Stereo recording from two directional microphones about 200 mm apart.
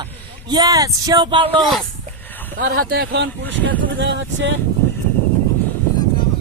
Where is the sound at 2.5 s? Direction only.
50° right (ahead or behind).